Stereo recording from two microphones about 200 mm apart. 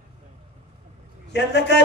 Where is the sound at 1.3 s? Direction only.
60° left (ahead or behind).